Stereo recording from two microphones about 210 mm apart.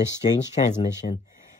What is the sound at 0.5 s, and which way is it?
Speech, 30° left (ahead or behind).